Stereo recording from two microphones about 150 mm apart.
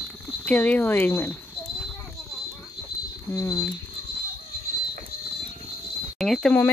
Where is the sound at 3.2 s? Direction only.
20° left (ahead or behind).